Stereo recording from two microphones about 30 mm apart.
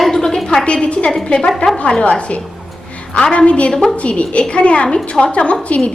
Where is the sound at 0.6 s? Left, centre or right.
Left.